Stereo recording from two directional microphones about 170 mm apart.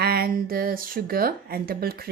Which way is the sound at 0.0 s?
65° right (ahead or behind).